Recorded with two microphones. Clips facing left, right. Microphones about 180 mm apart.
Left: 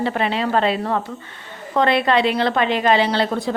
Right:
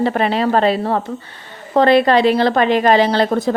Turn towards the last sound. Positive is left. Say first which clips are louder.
# right 5 dB
turn(degrees=-45)  # may be behind; listen again after turning